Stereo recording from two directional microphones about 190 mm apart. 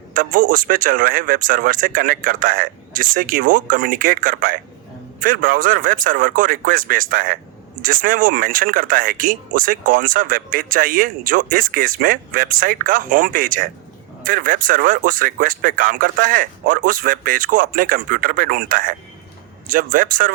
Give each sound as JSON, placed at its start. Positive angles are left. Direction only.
{"t": 0.1, "sound": "speech", "side_deg": -45}